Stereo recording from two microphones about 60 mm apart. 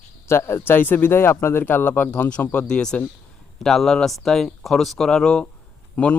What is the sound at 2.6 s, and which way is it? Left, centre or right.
Speech, centre.